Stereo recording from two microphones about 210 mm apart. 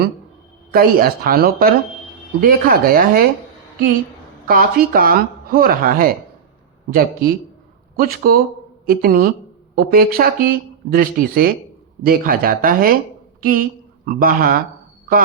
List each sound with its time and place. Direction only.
0.7 s speech: 45° right (ahead or behind)
4.4 s a woman's voice: 45° right (ahead or behind)